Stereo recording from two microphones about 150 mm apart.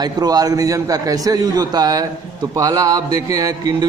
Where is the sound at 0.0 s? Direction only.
25° right (ahead or behind).